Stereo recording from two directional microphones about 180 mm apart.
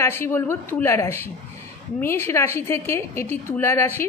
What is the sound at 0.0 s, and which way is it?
A woman's voice, 10° left (ahead or behind).